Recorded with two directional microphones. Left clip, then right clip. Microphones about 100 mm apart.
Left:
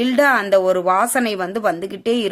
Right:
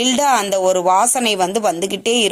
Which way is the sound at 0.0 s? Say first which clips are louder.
Even; 15° right (ahead or behind).